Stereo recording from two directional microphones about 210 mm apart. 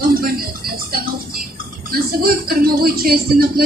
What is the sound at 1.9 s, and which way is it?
Speech, 45° right (ahead or behind).